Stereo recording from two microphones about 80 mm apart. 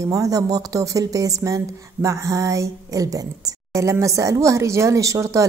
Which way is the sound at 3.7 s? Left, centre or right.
Right.